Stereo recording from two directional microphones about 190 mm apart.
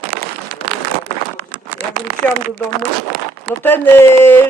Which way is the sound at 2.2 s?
10° left (ahead or behind).